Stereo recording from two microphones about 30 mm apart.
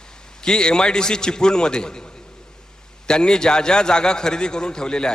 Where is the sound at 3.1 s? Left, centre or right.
Left.